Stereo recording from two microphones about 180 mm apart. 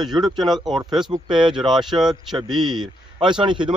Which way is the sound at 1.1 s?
25° right (ahead or behind).